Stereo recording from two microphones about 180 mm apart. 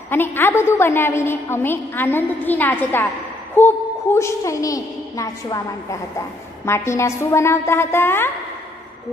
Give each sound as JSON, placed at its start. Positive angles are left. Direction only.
{"t": 0.1, "sound": "a woman's voice", "side_deg": 10}